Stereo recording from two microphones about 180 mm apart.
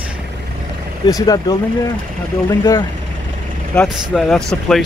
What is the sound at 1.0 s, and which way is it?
Speech, 20° left (ahead or behind).